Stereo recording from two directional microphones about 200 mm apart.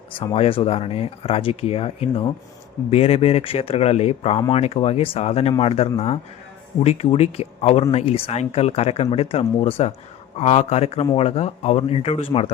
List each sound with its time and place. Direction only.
0.3 s speech: 30° left (ahead or behind)